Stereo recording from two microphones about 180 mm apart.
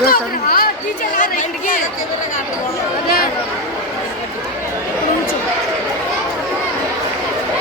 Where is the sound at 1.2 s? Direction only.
50° left (ahead or behind).